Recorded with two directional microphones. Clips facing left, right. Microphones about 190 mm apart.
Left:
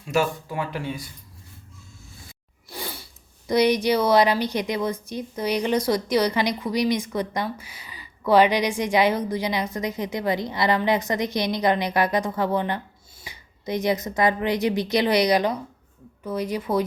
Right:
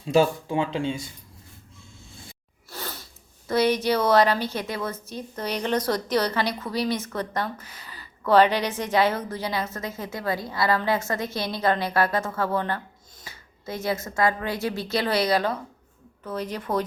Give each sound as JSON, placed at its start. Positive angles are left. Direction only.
{"t": 0.0, "sound": "speech", "side_deg": -30}
{"t": 2.6, "sound": "speech", "side_deg": 10}